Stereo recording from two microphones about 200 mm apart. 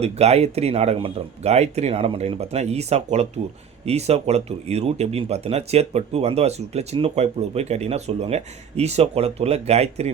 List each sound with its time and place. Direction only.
0.0 s speech: 30° right (ahead or behind)